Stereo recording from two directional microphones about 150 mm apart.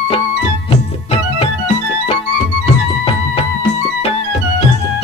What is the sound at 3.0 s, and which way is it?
Music, 40° left (ahead or behind).